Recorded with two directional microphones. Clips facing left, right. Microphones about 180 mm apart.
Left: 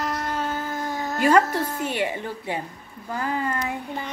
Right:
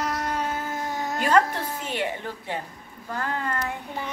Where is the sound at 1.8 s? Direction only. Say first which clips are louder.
Left 3 dB; 10° left (ahead or behind).